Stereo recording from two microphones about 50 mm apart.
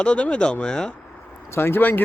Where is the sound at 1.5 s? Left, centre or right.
Left.